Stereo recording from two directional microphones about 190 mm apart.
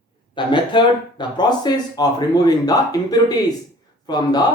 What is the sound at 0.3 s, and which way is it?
Speech, 25° left (ahead or behind).